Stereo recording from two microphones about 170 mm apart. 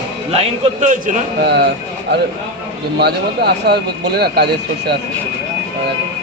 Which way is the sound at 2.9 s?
70° right (ahead or behind).